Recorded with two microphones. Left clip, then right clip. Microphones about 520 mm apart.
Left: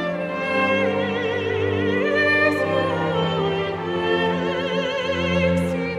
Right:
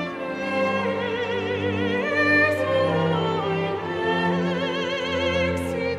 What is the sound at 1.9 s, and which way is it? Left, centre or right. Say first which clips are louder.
Music: left 1 dB; right.